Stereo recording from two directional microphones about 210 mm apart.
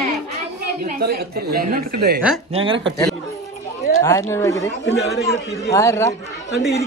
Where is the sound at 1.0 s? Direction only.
50° right (ahead or behind).